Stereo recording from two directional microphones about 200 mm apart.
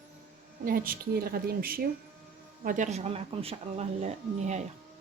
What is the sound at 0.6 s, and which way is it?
Speech, 45° right (ahead or behind).